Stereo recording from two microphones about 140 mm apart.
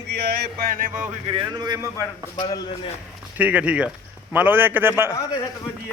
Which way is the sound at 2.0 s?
25° left (ahead or behind).